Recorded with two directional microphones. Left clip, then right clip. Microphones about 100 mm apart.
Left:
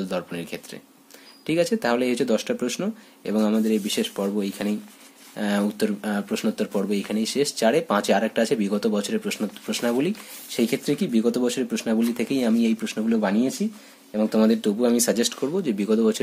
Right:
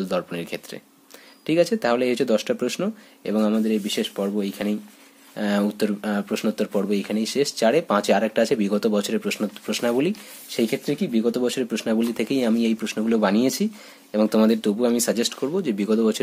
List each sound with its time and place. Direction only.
0.0 s speech: 40° right (ahead or behind)
1.4 s speech: 30° right (ahead or behind)
13.1 s speech: 50° right (ahead or behind)
14.4 s speech: 25° right (ahead or behind)